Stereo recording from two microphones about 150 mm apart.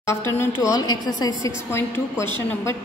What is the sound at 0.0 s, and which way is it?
A woman's voice, 15° left (ahead or behind).